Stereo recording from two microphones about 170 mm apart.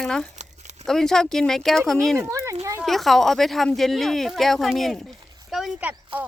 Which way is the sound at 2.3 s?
20° right (ahead or behind).